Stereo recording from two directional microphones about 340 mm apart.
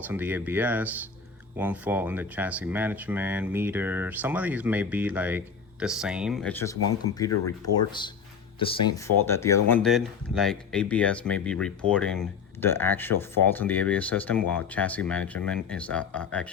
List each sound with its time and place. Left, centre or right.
0.1 s speech: centre